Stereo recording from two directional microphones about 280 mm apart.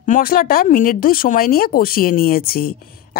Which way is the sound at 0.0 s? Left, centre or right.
Left.